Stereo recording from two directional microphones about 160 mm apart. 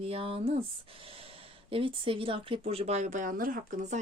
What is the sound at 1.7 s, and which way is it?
Speech, 35° right (ahead or behind).